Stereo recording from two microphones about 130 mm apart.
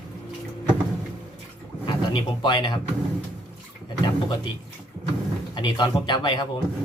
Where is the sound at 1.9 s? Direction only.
35° left (ahead or behind).